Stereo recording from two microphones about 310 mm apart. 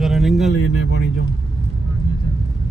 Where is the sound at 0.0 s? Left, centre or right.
Centre.